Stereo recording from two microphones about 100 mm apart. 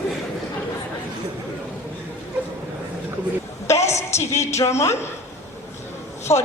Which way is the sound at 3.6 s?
30° left (ahead or behind).